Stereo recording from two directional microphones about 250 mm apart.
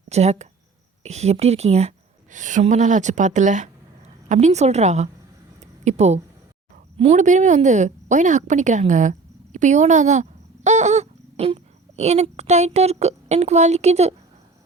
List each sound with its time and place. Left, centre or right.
0.1 s a woman's voice: right